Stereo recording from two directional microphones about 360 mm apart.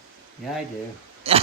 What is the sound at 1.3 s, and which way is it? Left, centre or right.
Speech, centre.